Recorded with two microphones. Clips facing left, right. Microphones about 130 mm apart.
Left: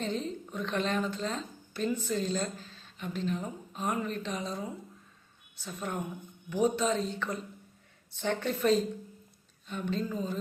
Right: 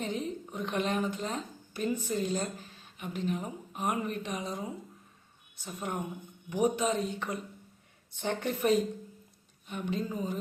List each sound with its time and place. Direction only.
0.0 s a woman's voice: 15° right (ahead or behind)